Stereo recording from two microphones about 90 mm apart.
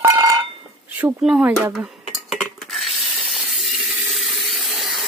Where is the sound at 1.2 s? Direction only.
20° right (ahead or behind).